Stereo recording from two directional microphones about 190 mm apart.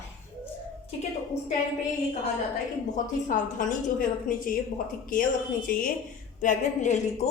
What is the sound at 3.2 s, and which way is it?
A woman's voice, 40° left (ahead or behind).